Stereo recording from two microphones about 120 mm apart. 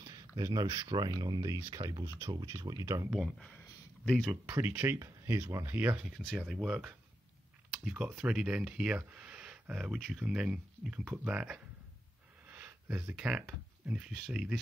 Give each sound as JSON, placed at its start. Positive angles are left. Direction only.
{"t": 0.0, "sound": "speech", "side_deg": -30}
{"t": 3.1, "sound": "speech", "side_deg": -5}
{"t": 3.5, "sound": "a sound", "side_deg": 10}
{"t": 4.3, "sound": "speech", "side_deg": -15}
{"t": 5.8, "sound": "speech", "side_deg": -10}
{"t": 12.4, "sound": "a sound", "side_deg": -15}
{"t": 13.1, "sound": "speech", "side_deg": -5}